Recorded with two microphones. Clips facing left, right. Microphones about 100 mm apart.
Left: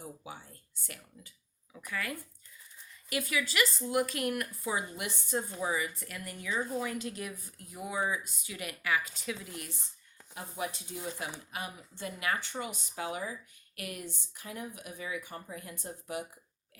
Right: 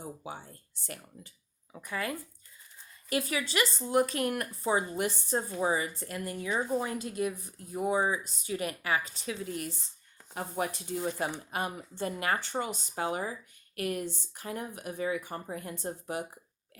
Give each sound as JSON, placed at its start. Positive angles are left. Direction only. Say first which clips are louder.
{"t": 0.3, "sound": "speech", "louder": "right 4 dB", "side_deg": -35}
{"t": 10.3, "sound": "speech", "louder": "right 5 dB", "side_deg": -50}
{"t": 10.9, "sound": "speech", "louder": "right 7 dB", "side_deg": -35}
{"t": 11.5, "sound": "speech", "louder": "right 7 dB", "side_deg": -45}